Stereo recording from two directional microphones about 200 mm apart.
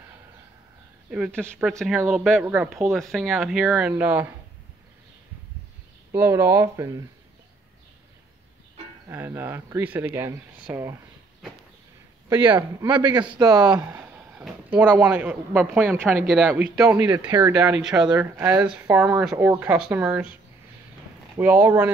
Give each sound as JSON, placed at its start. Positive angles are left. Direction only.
{"t": 1.1, "sound": "speech", "side_deg": -10}
{"t": 1.7, "sound": "speech", "side_deg": 5}
{"t": 6.1, "sound": "speech", "side_deg": -10}
{"t": 9.1, "sound": "speech", "side_deg": -10}
{"t": 13.4, "sound": "speech", "side_deg": -15}
{"t": 17.3, "sound": "speech", "side_deg": -20}
{"t": 17.8, "sound": "speech", "side_deg": -5}
{"t": 21.4, "sound": "speech", "side_deg": -10}